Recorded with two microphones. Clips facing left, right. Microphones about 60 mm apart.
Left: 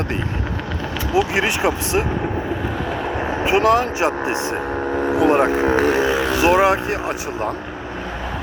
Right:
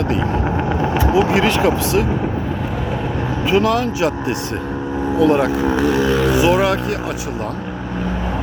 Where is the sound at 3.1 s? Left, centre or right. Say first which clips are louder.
Right 1 dB; left.